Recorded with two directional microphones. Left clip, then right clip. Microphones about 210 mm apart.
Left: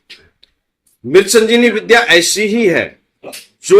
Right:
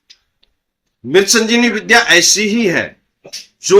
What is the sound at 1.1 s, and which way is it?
Speech, 20° right (ahead or behind).